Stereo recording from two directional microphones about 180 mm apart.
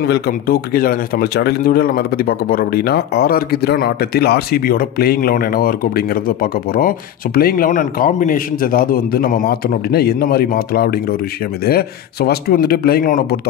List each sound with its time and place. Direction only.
0.0 s speech: 60° left (ahead or behind)